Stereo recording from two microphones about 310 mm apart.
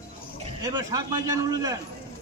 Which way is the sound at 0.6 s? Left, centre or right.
Centre.